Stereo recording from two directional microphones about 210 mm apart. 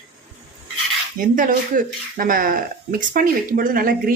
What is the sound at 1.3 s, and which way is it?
A woman's voice, 40° right (ahead or behind).